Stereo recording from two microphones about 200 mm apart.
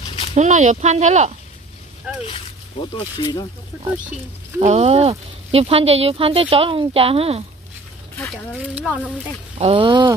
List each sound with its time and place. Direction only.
0.3 s speech: 35° right (ahead or behind)
3.0 s speech: 20° left (ahead or behind)
4.6 s speech: 30° right (ahead or behind)
9.6 s speech: 25° right (ahead or behind)